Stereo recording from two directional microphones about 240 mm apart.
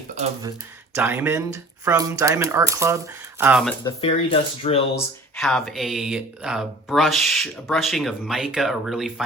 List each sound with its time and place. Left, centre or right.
0.9 s speech: centre
3.4 s speech: centre
3.8 s speech: left
5.4 s speech: centre